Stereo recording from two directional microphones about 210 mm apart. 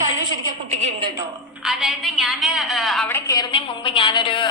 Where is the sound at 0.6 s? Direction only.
30° right (ahead or behind).